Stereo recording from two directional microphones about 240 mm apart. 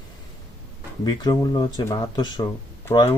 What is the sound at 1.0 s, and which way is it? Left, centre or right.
Speech, centre.